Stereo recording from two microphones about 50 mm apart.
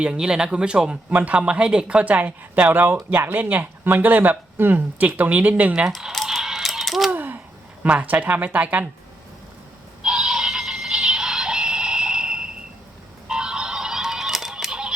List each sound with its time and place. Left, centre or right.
0.0 s speech: centre
6.2 s a sound: centre
7.1 s a sound: right
7.9 s speech: right
10.0 s synthetic singing: centre
13.2 s music: centre